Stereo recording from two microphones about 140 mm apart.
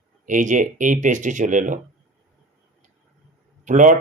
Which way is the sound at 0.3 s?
65° right (ahead or behind).